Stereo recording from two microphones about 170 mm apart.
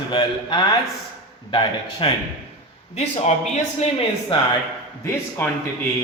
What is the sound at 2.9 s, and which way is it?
A man's voice, 40° left (ahead or behind).